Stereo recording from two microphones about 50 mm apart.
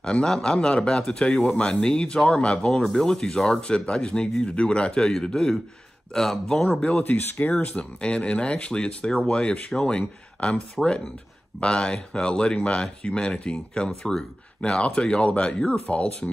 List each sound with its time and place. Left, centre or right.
0.0 s speech: centre
7.1 s speech: left
7.6 s speech: left